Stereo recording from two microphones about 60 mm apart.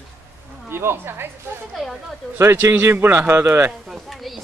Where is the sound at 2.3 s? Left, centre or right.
Right.